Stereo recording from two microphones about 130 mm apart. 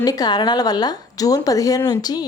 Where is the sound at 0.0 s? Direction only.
30° left (ahead or behind).